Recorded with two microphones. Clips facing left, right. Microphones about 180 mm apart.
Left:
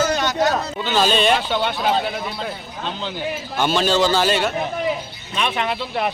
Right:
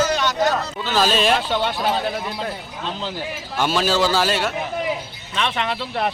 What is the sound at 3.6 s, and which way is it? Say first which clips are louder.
Speech: left 1 dB; 5° right (ahead or behind).